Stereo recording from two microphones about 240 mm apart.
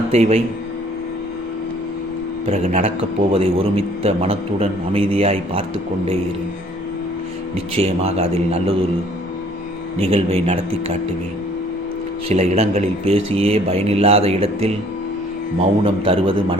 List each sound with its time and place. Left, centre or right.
0.1 s a man's voice: right
2.5 s a man's voice: right
7.5 s a man's voice: right
10.0 s a man's voice: right
12.3 s a man's voice: right